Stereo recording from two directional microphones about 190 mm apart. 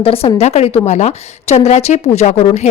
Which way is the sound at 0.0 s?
30° left (ahead or behind).